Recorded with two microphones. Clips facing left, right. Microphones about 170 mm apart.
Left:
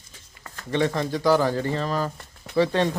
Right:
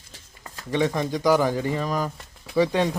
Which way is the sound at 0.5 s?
10° right (ahead or behind).